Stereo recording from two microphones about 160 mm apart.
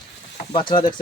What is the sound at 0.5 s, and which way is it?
Speech, 30° left (ahead or behind).